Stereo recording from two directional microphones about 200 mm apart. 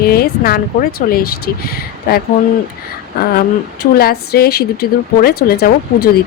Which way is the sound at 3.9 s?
50° left (ahead or behind).